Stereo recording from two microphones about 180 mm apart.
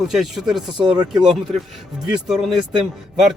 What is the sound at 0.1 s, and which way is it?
Speech, centre (ahead or behind).